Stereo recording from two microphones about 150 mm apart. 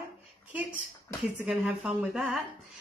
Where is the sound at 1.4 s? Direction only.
5° right (ahead or behind).